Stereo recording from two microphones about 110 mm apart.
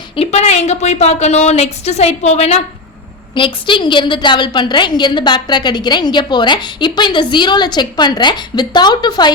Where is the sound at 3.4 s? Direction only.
50° left (ahead or behind).